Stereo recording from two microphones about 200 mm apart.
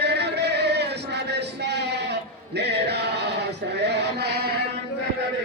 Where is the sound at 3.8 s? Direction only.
55° right (ahead or behind).